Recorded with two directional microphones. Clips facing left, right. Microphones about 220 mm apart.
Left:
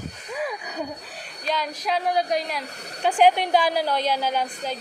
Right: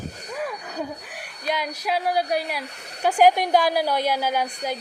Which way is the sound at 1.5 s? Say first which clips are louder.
Even; 10° right (ahead or behind).